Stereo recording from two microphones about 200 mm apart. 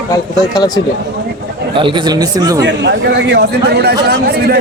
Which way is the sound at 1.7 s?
25° right (ahead or behind).